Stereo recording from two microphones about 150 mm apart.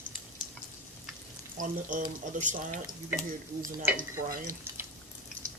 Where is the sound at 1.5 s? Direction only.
65° right (ahead or behind).